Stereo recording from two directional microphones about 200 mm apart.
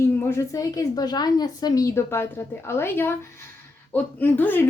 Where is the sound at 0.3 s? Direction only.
15° left (ahead or behind).